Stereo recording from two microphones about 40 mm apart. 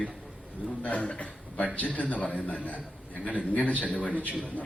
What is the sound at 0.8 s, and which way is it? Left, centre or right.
A man's voice, left.